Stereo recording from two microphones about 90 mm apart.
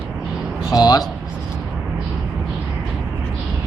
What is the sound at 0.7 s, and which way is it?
Speech, 45° left (ahead or behind).